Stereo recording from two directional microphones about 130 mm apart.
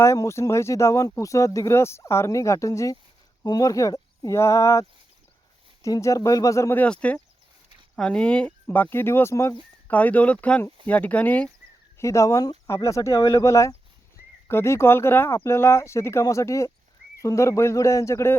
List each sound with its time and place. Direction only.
0.0 s speech: 20° left (ahead or behind)
11.9 s speech: 25° left (ahead or behind)